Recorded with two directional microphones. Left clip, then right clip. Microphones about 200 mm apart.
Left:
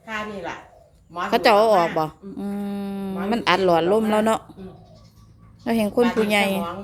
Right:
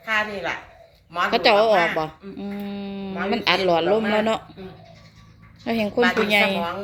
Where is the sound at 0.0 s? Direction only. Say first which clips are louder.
Right 6 dB; 10° left (ahead or behind).